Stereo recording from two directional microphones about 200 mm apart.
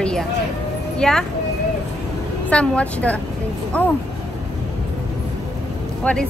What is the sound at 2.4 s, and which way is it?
Speech, 5° left (ahead or behind).